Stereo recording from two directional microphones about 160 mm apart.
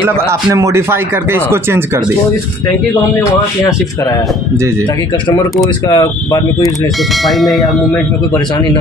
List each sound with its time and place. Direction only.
0.0 s speech: 15° right (ahead or behind)
5.9 s speech: 25° left (ahead or behind)
7.2 s speech: centre (ahead or behind)